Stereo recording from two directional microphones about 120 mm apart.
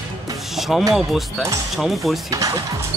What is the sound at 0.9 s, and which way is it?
Speech, centre (ahead or behind).